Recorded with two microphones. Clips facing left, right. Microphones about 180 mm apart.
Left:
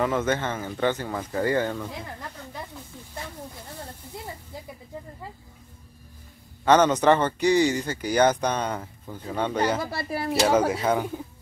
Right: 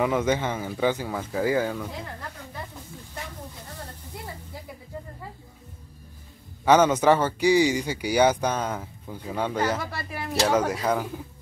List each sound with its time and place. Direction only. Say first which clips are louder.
0.0 s speech: right 1 dB; 10° right (ahead or behind)
6.6 s speech: even; 10° right (ahead or behind)
9.8 s speech: left 5 dB; 35° left (ahead or behind)
10.4 s speech: left 1 dB; centre (ahead or behind)